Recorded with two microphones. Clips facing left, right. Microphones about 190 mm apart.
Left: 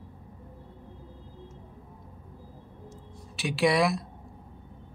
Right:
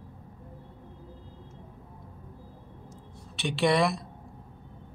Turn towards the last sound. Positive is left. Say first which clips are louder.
# even
turn(degrees=0)  # may be behind; listen again after turning